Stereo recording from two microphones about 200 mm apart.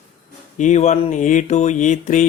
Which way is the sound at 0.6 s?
35° left (ahead or behind).